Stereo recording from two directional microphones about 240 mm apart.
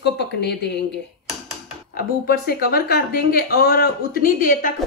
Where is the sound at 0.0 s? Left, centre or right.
Left.